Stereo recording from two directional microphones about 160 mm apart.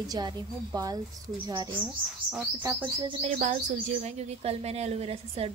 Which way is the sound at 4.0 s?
45° right (ahead or behind).